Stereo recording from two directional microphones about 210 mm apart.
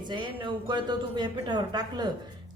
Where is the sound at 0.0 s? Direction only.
20° right (ahead or behind).